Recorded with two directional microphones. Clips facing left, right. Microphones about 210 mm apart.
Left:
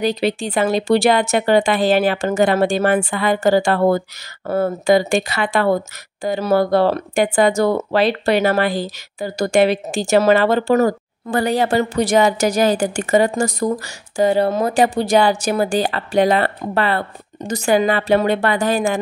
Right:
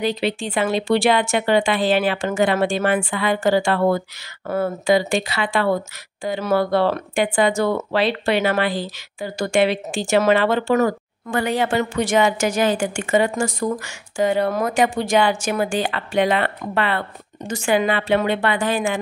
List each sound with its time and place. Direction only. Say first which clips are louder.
0.0 s speech: left 3 dB; 40° left (ahead or behind)